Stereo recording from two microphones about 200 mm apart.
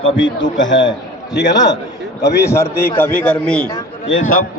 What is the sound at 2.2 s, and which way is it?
A man's voice, 15° left (ahead or behind).